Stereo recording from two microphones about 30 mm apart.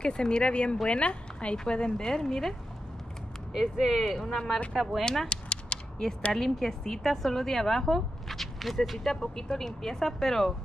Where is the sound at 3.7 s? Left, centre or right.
Centre.